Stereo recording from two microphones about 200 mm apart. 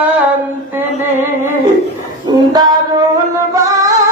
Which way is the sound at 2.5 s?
20° right (ahead or behind).